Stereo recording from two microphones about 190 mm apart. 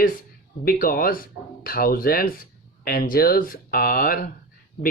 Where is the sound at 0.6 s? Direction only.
50° left (ahead or behind).